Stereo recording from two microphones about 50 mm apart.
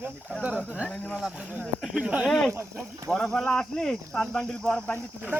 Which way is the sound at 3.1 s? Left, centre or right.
Centre.